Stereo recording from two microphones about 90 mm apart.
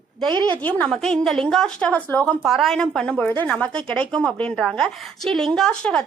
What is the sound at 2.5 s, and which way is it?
A woman's voice, centre (ahead or behind).